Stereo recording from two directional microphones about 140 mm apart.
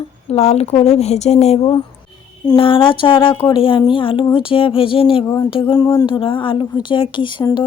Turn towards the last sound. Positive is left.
turn(degrees=35)  # may be behind; listen again after turning